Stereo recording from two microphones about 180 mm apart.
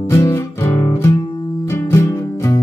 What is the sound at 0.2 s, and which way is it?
Music, 15° left (ahead or behind).